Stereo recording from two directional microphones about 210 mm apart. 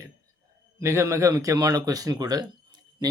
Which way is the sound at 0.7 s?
15° right (ahead or behind).